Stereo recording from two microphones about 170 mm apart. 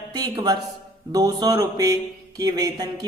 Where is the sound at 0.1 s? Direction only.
25° right (ahead or behind).